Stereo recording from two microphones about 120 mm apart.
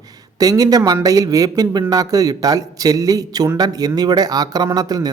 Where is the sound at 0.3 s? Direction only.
30° right (ahead or behind).